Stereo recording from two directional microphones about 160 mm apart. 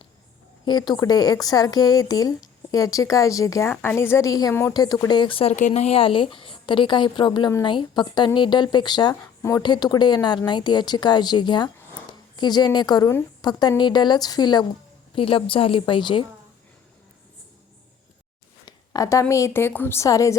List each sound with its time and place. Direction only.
0.6 s a woman's voice: 25° left (ahead or behind)
18.6 s a sound: 20° left (ahead or behind)
19.3 s speech: 15° left (ahead or behind)